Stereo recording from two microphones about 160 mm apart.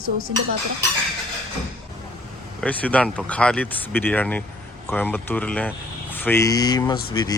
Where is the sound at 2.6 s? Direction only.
10° left (ahead or behind).